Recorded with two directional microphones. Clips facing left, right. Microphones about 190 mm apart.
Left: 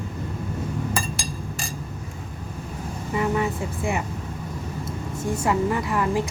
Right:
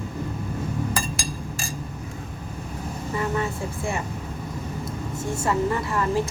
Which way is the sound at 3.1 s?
15° left (ahead or behind).